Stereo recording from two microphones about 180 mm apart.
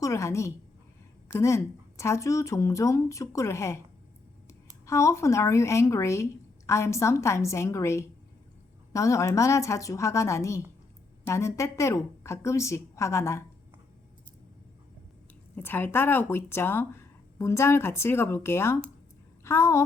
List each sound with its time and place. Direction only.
0.0 s speech: 15° left (ahead or behind)
4.9 s speech: 15° left (ahead or behind)
15.5 s speech: 10° left (ahead or behind)